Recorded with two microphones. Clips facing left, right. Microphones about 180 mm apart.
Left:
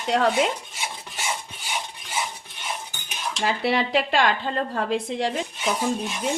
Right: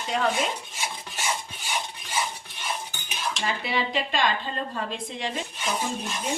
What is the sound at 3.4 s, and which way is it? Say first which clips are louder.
Speech: left 6 dB; 75° left (ahead or behind).